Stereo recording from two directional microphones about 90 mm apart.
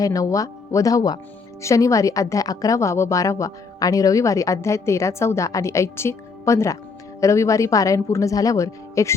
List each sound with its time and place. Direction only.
0.0 s a woman's voice: 40° left (ahead or behind)